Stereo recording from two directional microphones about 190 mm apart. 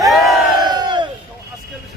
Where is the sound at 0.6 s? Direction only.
20° right (ahead or behind).